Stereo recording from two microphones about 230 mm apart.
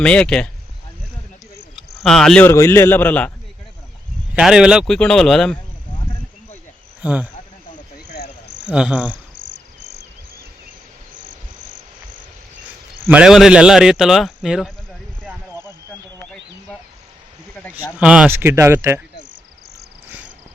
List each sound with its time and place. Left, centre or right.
0.0 s speech: centre
1.7 s speech: centre
4.4 s speech: centre
7.0 s speech: centre
8.6 s speech: centre
9.4 s cricket: right
13.1 s speech: centre
15.3 s a sound: centre
17.7 s speech: centre